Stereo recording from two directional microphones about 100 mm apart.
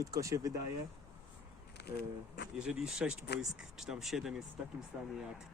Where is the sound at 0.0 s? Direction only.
35° right (ahead or behind).